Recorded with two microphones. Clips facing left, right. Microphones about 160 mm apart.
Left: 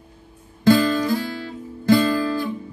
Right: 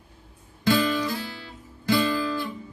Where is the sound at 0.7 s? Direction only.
45° left (ahead or behind).